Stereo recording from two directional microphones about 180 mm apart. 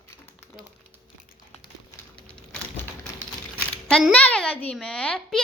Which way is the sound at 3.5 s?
5° left (ahead or behind).